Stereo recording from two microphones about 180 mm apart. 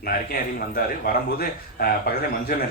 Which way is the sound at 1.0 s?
55° left (ahead or behind).